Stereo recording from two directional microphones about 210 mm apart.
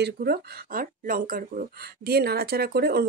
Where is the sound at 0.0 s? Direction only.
50° right (ahead or behind).